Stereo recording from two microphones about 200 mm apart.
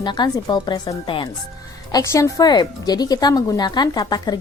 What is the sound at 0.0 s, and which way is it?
A woman's voice, 20° left (ahead or behind).